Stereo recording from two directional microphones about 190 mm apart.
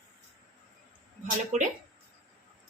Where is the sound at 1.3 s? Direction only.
40° right (ahead or behind).